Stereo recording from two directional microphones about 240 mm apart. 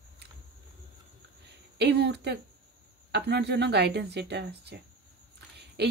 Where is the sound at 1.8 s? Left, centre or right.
Right.